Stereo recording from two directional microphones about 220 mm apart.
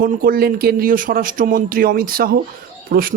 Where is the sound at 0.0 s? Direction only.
40° right (ahead or behind).